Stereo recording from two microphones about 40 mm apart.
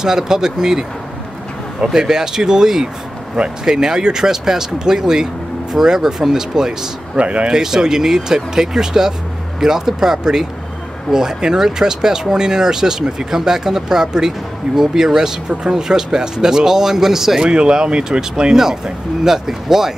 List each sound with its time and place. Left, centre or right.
0.0 s speech: centre
2.0 s speech: centre
7.2 s speech: right
7.5 s speech: centre
17.5 s speech: right